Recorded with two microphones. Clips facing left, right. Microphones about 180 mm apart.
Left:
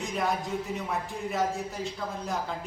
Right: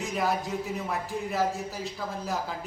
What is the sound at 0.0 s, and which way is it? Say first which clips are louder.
A man's voice: right 1 dB; centre (ahead or behind).